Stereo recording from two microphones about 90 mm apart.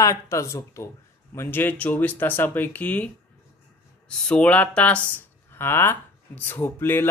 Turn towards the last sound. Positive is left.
turn(degrees=25)  # may be behind; listen again after turning